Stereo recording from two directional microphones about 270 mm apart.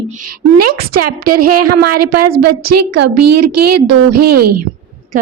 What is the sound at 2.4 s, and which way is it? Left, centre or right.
A woman's voice, right.